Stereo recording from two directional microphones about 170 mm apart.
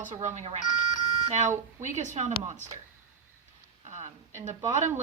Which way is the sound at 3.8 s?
45° right (ahead or behind).